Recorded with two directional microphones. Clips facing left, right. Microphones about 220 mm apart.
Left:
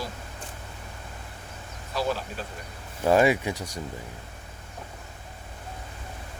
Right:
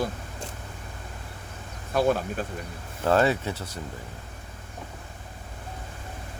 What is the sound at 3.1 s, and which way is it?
Speech, 10° left (ahead or behind).